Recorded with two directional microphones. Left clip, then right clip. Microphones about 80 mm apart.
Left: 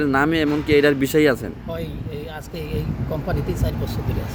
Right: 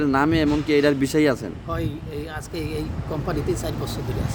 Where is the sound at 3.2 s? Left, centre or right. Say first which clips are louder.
Right 3 dB; right.